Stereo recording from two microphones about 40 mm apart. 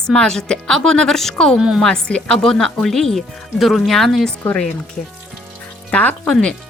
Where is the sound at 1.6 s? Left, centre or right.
Centre.